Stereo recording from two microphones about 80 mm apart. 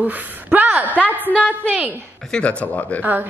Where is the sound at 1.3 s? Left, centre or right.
Centre.